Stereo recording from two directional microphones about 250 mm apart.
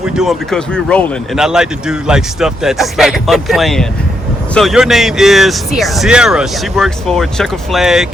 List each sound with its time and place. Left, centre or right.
0.0 s speech: centre